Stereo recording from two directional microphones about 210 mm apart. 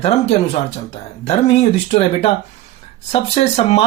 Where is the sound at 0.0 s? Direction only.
30° left (ahead or behind).